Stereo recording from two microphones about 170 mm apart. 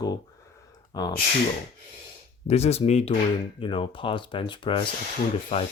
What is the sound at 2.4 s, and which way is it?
Speech, 40° left (ahead or behind).